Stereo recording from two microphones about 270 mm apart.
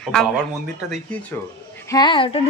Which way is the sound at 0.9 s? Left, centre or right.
Centre.